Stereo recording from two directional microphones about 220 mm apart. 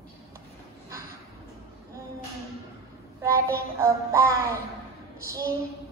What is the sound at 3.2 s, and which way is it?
Music, 15° right (ahead or behind).